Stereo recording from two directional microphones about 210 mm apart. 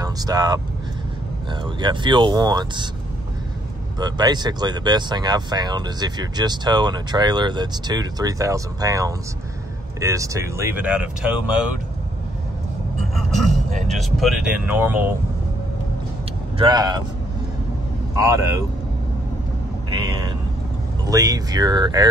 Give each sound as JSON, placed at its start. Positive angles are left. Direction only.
{"t": 0.0, "sound": "speech", "side_deg": -20}
{"t": 4.0, "sound": "speech", "side_deg": -20}
{"t": 13.1, "sound": "speech", "side_deg": 0}
{"t": 16.5, "sound": "speech", "side_deg": -20}
{"t": 18.1, "sound": "speech", "side_deg": -15}
{"t": 21.1, "sound": "speech", "side_deg": -15}